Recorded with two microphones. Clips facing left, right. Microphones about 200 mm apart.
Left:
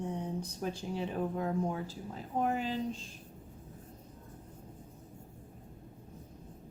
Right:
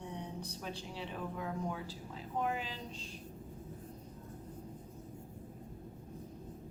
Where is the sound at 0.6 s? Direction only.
45° left (ahead or behind).